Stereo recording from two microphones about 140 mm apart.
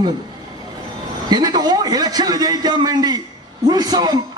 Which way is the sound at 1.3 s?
30° right (ahead or behind).